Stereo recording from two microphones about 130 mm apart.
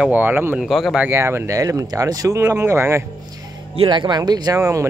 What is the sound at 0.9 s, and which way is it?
Speech, 15° right (ahead or behind).